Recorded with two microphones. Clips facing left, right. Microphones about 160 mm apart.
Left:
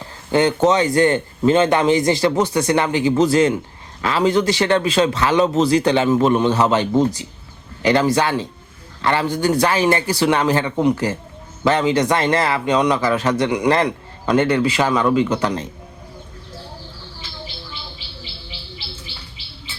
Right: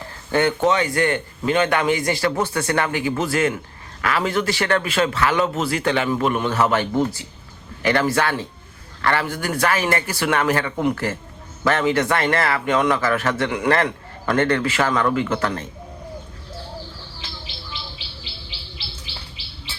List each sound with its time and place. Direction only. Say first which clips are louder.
0.3 s a man's voice: left 3 dB; 20° left (ahead or behind)